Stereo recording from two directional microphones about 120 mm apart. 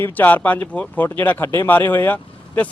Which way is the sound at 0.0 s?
15° left (ahead or behind).